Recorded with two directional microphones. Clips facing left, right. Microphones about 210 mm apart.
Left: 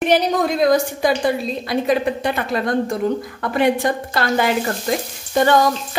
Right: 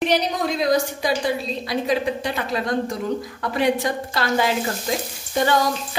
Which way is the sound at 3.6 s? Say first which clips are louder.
Left 3 dB; 55° left (ahead or behind).